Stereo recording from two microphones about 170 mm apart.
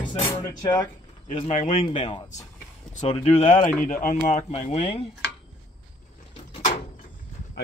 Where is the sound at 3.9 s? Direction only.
50° left (ahead or behind).